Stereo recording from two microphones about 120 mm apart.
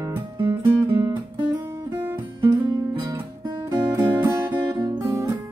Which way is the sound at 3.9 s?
20° right (ahead or behind).